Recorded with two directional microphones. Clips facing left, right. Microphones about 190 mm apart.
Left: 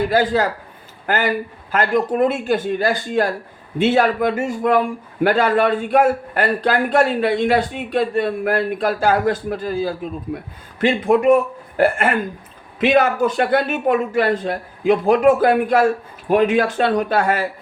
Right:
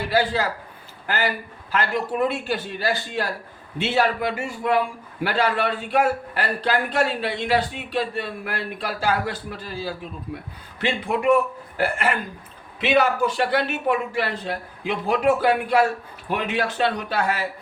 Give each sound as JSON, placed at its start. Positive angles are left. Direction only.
{"t": 0.1, "sound": "a man's voice", "side_deg": 45}